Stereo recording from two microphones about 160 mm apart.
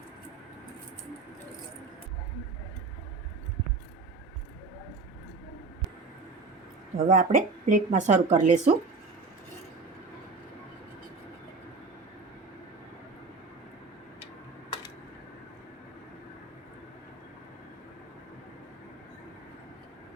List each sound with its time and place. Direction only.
6.9 s a woman's voice: 55° right (ahead or behind)